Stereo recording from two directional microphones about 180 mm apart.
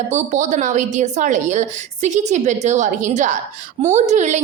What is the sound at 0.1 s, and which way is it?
A woman's voice, 45° right (ahead or behind).